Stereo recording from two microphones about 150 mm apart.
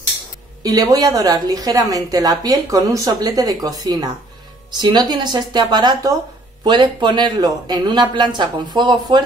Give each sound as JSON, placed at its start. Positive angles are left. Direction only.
{"t": 0.7, "sound": "a woman's voice", "side_deg": -25}